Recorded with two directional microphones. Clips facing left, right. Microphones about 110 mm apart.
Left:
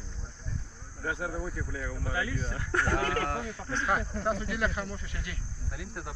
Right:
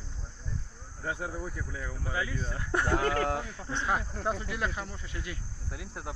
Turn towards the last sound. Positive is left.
turn(degrees=-25)  # may be behind; listen again after turning